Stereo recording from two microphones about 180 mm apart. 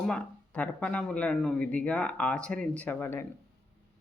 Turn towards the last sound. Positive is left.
turn(degrees=10)  # may be behind; listen again after turning